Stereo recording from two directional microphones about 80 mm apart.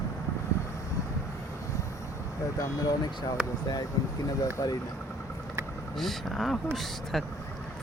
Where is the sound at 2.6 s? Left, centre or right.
Left.